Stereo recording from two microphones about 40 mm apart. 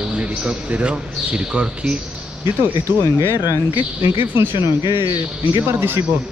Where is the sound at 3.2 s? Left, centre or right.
Right.